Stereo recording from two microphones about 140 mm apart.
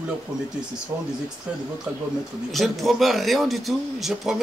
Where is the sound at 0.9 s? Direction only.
15° right (ahead or behind).